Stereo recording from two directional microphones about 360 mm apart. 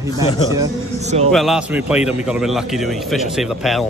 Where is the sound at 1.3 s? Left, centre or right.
Centre.